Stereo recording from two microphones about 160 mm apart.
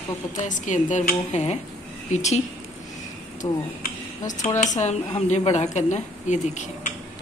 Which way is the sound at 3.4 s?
30° left (ahead or behind).